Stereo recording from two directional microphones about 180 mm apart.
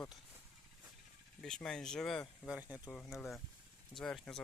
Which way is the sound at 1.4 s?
5° left (ahead or behind).